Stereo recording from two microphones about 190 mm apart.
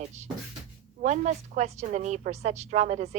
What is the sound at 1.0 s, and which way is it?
A woman's voice, 40° right (ahead or behind).